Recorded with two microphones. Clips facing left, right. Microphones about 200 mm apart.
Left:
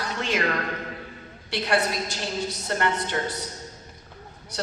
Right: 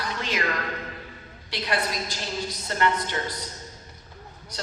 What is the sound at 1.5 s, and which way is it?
A woman's voice, 55° left (ahead or behind).